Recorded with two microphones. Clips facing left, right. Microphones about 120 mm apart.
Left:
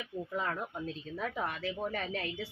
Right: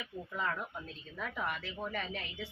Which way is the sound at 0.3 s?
40° left (ahead or behind).